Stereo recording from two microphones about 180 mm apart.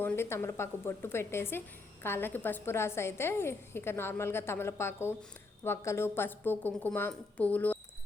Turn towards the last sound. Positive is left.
turn(degrees=10)  # may be behind; listen again after turning